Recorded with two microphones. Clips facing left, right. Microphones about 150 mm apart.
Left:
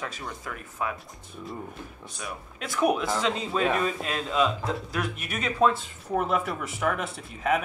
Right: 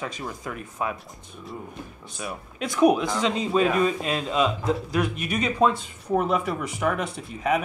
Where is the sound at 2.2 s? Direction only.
20° right (ahead or behind).